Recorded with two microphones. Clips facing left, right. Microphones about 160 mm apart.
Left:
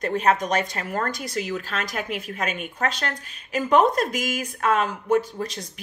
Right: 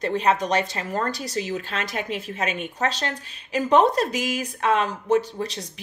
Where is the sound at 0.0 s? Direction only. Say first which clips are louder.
Even; 30° right (ahead or behind).